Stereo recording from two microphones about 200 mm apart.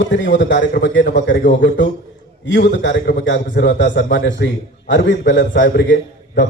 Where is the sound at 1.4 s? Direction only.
45° left (ahead or behind).